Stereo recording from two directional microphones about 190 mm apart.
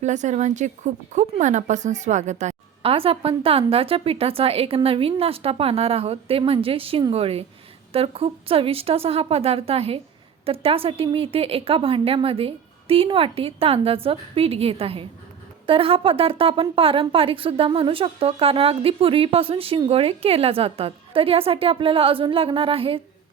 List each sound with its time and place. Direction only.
0.0 s a woman's voice: 40° right (ahead or behind)